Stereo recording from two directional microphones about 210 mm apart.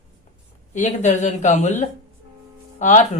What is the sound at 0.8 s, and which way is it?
Speech, 35° left (ahead or behind).